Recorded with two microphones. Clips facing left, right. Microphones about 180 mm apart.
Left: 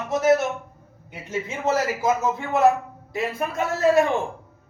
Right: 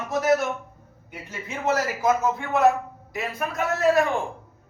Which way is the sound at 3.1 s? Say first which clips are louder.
Left 3 dB; 25° left (ahead or behind).